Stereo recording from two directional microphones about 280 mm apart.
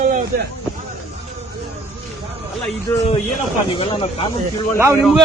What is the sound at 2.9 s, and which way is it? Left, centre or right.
Speech, centre.